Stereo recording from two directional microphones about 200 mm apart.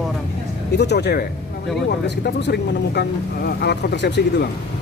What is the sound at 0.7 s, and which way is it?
Speech, 55° left (ahead or behind).